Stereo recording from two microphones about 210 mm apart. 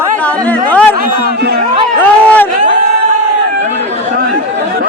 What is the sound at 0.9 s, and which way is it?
Speech, 45° right (ahead or behind).